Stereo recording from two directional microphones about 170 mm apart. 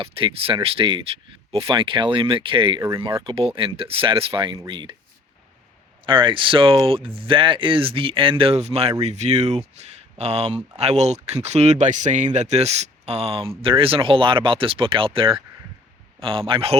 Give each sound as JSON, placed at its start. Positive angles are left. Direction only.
{"t": 0.0, "sound": "speech", "side_deg": -30}
{"t": 2.8, "sound": "speech", "side_deg": -20}
{"t": 3.2, "sound": "speech", "side_deg": -30}
{"t": 6.1, "sound": "speech", "side_deg": -30}